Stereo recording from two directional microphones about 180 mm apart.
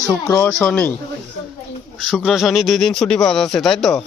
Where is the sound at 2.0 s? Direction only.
Centre (ahead or behind).